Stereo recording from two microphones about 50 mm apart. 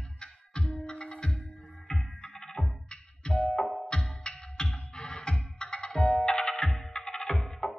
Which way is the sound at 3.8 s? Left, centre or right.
Centre.